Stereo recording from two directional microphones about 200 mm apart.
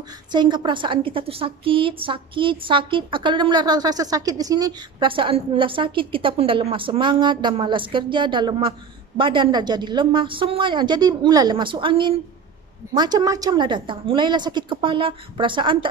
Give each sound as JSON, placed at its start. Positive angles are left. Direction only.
{"t": 0.3, "sound": "a woman's voice", "side_deg": -20}